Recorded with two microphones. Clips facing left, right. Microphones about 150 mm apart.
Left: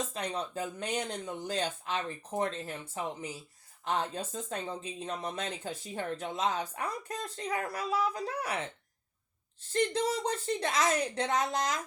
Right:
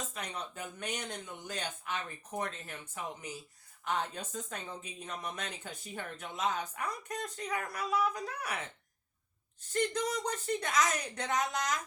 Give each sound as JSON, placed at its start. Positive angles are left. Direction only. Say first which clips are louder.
{"t": 0.1, "sound": "speech", "louder": "left 6 dB", "side_deg": 30}
{"t": 9.7, "sound": "speech", "louder": "left 3 dB", "side_deg": 30}